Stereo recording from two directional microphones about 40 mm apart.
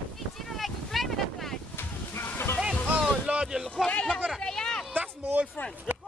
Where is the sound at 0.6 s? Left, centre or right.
Centre.